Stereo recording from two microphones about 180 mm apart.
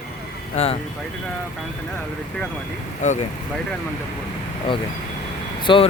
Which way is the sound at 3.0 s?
45° left (ahead or behind).